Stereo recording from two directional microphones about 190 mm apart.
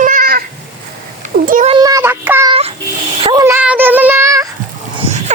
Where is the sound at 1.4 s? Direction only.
45° right (ahead or behind).